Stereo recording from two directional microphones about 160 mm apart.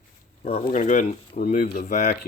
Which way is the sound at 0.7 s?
50° left (ahead or behind).